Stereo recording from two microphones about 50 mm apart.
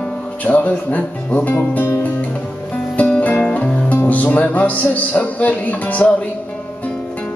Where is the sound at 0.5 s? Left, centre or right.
Left.